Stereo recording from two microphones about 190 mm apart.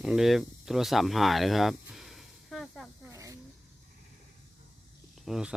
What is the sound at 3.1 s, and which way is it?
Snake, 15° right (ahead or behind).